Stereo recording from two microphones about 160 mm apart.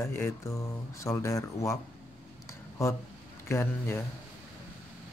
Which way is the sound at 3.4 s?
15° left (ahead or behind).